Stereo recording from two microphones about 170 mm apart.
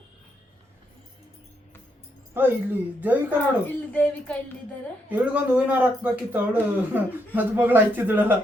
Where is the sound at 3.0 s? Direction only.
10° right (ahead or behind).